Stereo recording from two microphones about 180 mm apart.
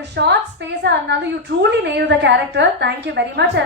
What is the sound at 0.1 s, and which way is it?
A woman's voice, 70° right (ahead or behind).